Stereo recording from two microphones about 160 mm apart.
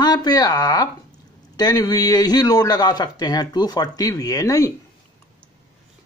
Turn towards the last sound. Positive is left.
turn(degrees=20)  # may be behind; listen again after turning